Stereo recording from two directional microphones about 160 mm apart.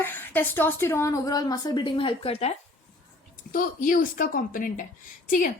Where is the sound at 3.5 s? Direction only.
60° left (ahead or behind).